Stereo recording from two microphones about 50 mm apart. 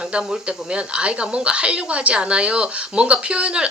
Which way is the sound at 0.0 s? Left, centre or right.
Centre.